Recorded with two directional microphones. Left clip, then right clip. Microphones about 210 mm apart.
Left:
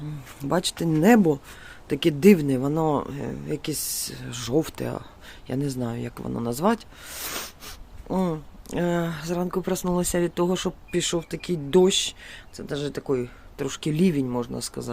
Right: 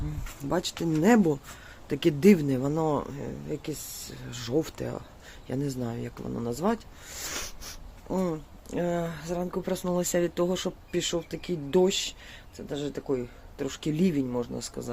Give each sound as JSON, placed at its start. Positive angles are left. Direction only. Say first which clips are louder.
{"t": 0.4, "sound": "speech", "louder": "left 4 dB", "side_deg": 20}